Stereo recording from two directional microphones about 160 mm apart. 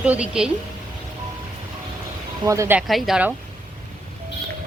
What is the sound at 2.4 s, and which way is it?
Speech, 20° right (ahead or behind).